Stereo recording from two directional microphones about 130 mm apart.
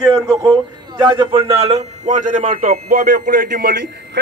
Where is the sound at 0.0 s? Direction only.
30° right (ahead or behind); by 3.6 s 90° right.